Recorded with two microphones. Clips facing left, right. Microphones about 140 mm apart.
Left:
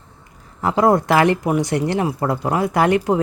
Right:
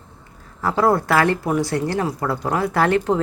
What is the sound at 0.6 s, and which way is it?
Speech, 15° left (ahead or behind).